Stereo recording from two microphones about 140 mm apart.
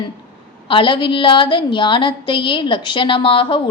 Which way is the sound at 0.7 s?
35° left (ahead or behind).